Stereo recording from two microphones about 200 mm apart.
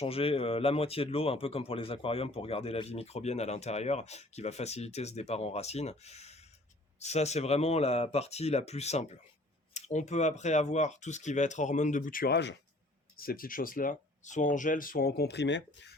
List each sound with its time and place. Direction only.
0.0 s speech: 30° left (ahead or behind); by 12.5 s 60° left (ahead or behind)
13.1 s speech: 45° left (ahead or behind); by 15.9 s 60° left (ahead or behind)